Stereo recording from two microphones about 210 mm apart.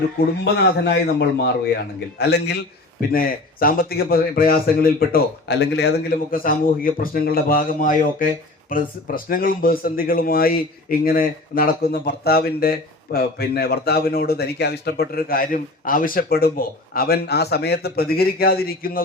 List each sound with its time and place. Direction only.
0.4 s a man's voice: 55° left (ahead or behind)